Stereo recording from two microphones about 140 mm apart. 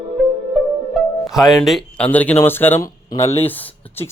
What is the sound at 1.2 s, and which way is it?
Speech, centre (ahead or behind).